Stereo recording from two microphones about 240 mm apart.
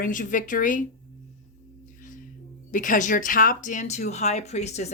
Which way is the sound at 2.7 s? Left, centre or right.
Left.